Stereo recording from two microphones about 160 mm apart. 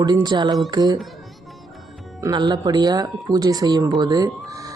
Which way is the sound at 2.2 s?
25° right (ahead or behind).